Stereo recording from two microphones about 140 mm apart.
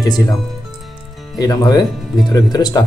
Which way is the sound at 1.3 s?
25° left (ahead or behind).